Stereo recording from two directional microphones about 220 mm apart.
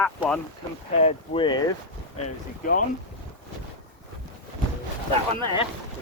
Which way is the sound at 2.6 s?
40° left (ahead or behind).